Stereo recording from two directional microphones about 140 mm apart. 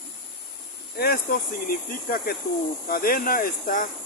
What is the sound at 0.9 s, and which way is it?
Speech, 90° left.